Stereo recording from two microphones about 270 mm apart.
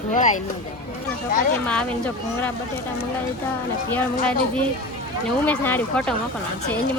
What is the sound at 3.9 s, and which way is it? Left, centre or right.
Speech, centre.